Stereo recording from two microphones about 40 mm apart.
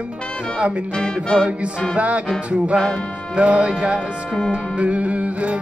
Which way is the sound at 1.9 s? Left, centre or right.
Right.